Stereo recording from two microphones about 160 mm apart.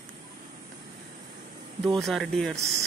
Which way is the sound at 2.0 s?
Centre (ahead or behind).